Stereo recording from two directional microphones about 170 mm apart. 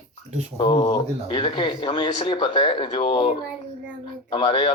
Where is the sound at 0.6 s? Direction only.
35° left (ahead or behind).